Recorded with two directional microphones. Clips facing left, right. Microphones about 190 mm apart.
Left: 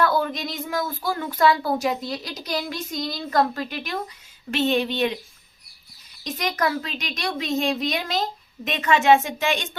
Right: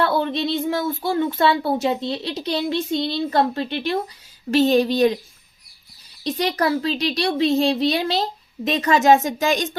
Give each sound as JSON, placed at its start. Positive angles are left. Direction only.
{"t": 0.0, "sound": "a child's voice", "side_deg": -30}
{"t": 6.2, "sound": "a child's voice", "side_deg": -30}